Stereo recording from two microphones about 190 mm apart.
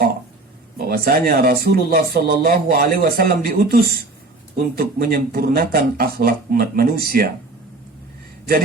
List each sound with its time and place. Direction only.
0.9 s speech: 50° right (ahead or behind)